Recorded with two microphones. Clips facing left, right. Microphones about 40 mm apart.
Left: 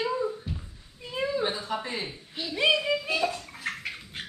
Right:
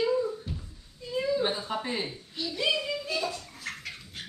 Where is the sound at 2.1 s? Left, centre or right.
Left.